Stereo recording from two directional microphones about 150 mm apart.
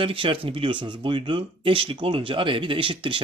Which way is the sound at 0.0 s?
35° right (ahead or behind).